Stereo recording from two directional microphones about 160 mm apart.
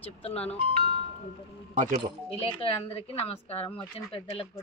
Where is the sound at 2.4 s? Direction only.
35° left (ahead or behind).